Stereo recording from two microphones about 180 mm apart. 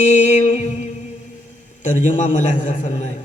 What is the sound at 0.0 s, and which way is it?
Music, 40° left (ahead or behind).